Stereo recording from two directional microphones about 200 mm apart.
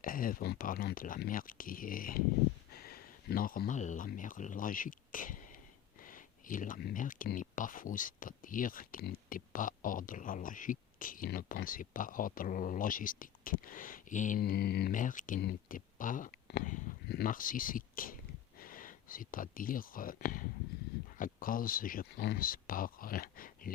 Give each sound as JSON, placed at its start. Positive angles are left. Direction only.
{"t": 0.0, "sound": "speech", "side_deg": 45}
{"t": 16.5, "sound": "a sound", "side_deg": 55}
{"t": 16.7, "sound": "speech", "side_deg": 45}